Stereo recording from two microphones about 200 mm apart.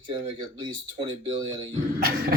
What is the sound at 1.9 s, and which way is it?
Speech, 50° right (ahead or behind).